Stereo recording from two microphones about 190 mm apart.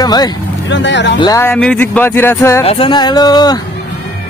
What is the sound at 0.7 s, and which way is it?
Speech, 70° left (ahead or behind).